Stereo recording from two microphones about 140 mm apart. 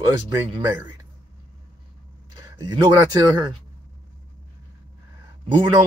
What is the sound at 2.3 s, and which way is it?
Speech, 30° right (ahead or behind).